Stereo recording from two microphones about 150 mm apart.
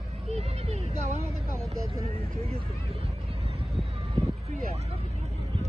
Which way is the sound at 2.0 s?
40° right (ahead or behind).